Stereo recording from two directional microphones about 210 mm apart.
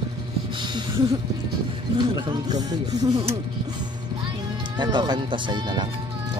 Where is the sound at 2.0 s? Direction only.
25° right (ahead or behind).